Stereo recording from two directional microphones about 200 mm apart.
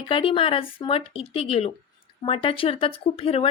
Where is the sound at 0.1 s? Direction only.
25° left (ahead or behind).